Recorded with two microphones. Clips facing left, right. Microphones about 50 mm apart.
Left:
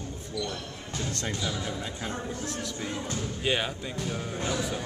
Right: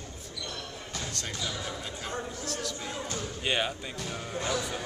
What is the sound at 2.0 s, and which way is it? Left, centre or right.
Speech, left.